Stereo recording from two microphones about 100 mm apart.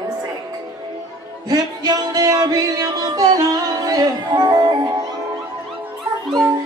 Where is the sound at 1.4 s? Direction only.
40° right (ahead or behind).